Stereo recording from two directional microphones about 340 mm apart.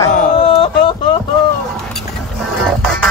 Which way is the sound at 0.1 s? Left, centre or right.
Left.